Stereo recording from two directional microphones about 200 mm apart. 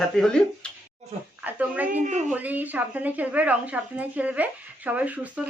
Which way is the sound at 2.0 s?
35° right (ahead or behind).